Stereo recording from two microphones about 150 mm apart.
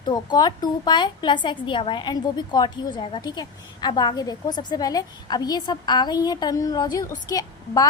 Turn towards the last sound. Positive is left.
turn(degrees=25)  # may be behind; listen again after turning